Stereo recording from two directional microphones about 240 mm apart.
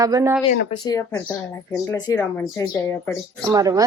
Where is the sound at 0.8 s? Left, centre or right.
Centre.